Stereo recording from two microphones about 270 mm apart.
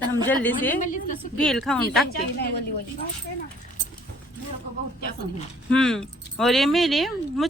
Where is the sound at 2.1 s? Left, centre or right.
Left.